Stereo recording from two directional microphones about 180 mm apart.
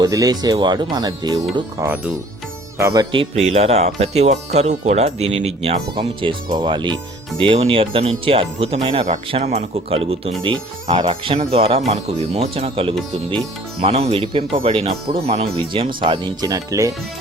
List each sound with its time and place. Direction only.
0.0 s speech: 20° right (ahead or behind)
9.4 s speech: 45° right (ahead or behind)
9.7 s speech: 35° right (ahead or behind)